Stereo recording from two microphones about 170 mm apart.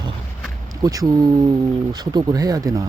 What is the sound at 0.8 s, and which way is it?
Speech, 20° right (ahead or behind).